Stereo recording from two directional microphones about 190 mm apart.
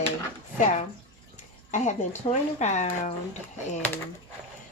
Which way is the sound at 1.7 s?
40° left (ahead or behind).